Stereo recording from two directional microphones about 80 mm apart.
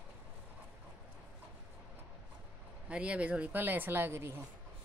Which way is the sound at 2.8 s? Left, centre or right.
Centre.